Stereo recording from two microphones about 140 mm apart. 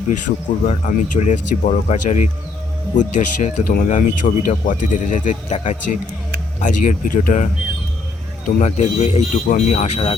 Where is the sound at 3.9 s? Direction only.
60° left (ahead or behind).